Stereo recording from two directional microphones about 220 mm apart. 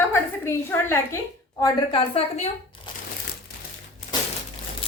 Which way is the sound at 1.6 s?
25° left (ahead or behind).